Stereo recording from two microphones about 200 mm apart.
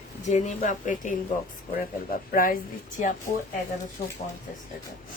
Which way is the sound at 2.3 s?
45° left (ahead or behind).